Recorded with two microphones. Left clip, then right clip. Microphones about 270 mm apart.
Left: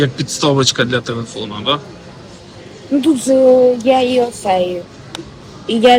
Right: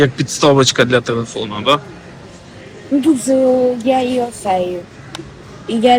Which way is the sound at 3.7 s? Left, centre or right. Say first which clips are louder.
Left 3 dB; centre.